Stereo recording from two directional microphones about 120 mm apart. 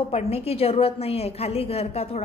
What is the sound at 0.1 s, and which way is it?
A woman's voice, 55° left (ahead or behind).